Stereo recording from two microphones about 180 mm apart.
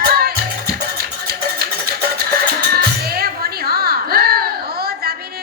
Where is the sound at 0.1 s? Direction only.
60° right (ahead or behind).